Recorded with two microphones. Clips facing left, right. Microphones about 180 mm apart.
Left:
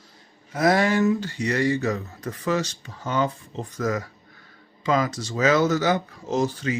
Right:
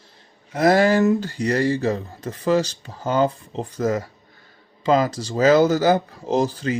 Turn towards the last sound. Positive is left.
turn(degrees=-35)  # may be behind; listen again after turning